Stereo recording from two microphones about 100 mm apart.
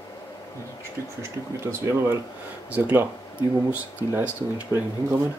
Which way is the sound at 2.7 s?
15° right (ahead or behind).